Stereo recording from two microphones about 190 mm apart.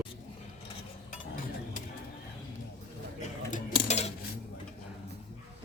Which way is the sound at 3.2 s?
35° left (ahead or behind).